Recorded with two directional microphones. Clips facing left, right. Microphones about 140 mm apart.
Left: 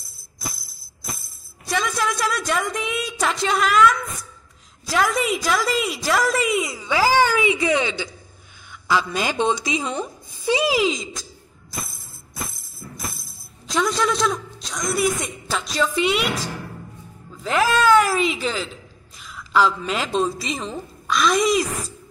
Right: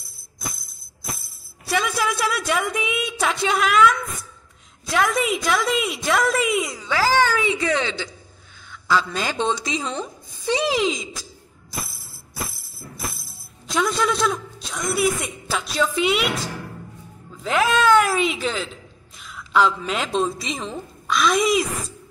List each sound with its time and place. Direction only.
0.0 s tambourine: centre (ahead or behind)
1.7 s a woman's voice: 5° right (ahead or behind)
6.8 s a woman's voice: 15° left (ahead or behind)
12.9 s a man's voice: centre (ahead or behind)